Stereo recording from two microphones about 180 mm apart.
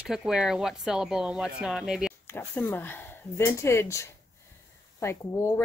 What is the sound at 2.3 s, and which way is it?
A woman's voice, 10° left (ahead or behind).